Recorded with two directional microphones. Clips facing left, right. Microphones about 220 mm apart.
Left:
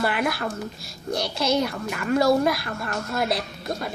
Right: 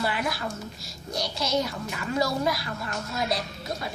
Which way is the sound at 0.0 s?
60° left (ahead or behind).